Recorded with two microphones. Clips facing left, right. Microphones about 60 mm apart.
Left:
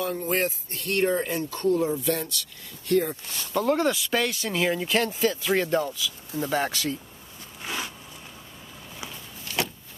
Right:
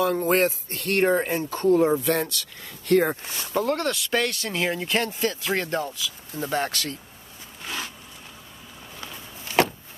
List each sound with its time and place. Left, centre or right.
0.0 s speech: right
1.4 s speech: right
1.9 s speech: right
3.3 s speech: right
3.6 s speech: centre
7.6 s a sound: centre
9.5 s a sound: right